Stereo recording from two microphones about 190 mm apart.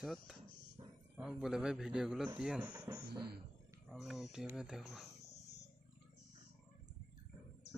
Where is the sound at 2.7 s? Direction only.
15° right (ahead or behind).